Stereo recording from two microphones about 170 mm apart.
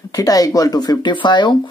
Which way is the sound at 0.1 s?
20° left (ahead or behind).